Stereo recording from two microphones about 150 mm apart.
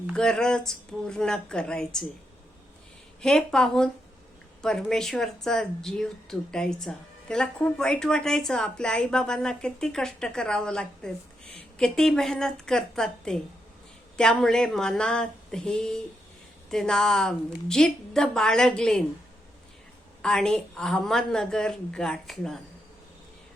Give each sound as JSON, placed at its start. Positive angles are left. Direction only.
{"t": 0.1, "sound": "a woman's voice", "side_deg": 5}
{"t": 3.2, "sound": "a woman's voice", "side_deg": 5}
{"t": 20.2, "sound": "a woman's voice", "side_deg": 5}